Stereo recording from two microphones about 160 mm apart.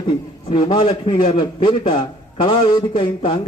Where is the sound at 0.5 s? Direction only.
30° left (ahead or behind).